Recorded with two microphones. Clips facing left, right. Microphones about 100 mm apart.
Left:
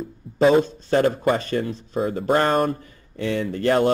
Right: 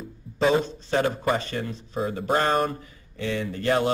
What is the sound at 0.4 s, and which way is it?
A man's voice, 40° left (ahead or behind).